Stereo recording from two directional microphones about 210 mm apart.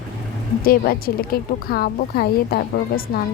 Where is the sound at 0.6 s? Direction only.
45° left (ahead or behind).